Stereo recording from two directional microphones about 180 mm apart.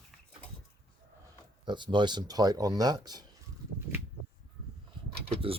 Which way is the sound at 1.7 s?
25° right (ahead or behind).